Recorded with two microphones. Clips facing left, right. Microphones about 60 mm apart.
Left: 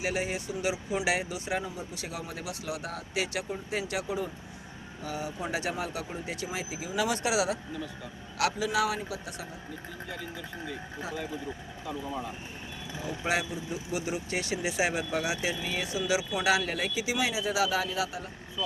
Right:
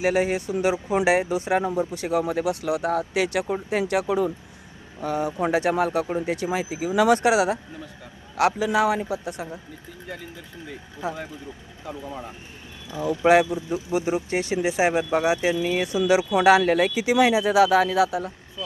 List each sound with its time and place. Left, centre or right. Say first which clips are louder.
0.0 s speech: right 9 dB; right
5.0 s speech: right 10 dB; right
11.0 s speech: right 8 dB; right
13.0 s speech: right 13 dB; right